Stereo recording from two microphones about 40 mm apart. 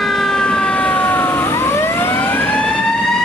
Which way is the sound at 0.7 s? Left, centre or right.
Left.